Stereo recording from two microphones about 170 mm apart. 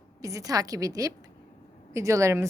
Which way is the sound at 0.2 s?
20° right (ahead or behind).